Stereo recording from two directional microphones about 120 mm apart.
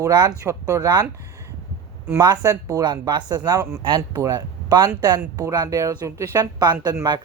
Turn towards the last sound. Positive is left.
turn(degrees=-25)  # may be behind; listen again after turning